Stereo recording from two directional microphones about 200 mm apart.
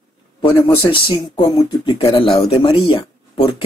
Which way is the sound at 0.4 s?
25° left (ahead or behind).